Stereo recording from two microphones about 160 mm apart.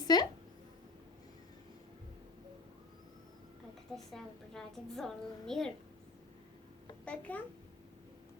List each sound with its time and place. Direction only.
0.0 s a woman's voice: 25° left (ahead or behind)
3.9 s a woman's voice: centre (ahead or behind)
7.0 s a child's voice: 10° left (ahead or behind)